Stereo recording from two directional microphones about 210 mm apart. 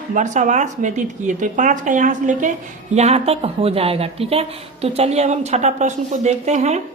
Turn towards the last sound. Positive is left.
turn(degrees=-30)  # may be behind; listen again after turning